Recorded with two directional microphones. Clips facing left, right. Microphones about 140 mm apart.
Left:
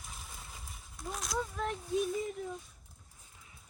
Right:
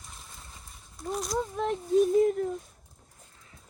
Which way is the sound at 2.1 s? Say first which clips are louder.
Right 13 dB; 60° right (ahead or behind).